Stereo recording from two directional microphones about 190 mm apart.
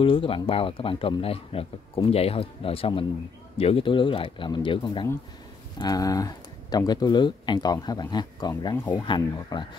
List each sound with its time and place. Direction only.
0.0 s speech: 30° left (ahead or behind); by 9.0 s 10° left (ahead or behind)
9.0 s speech: 25° left (ahead or behind)